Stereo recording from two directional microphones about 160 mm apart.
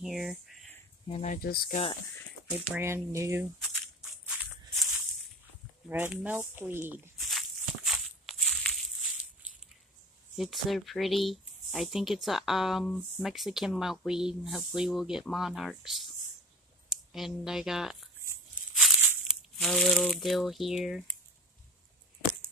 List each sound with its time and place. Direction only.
0.0 s speech: centre (ahead or behind)
1.2 s speech: 60° left (ahead or behind)
2.5 s speech: 10° right (ahead or behind)
4.7 s a sound: centre (ahead or behind)
5.9 s speech: 10° right (ahead or behind)
7.2 s walk: centre (ahead or behind)
10.3 s speech: centre (ahead or behind)
18.9 s a sound: 10° right (ahead or behind)
19.6 s speech: 5° left (ahead or behind)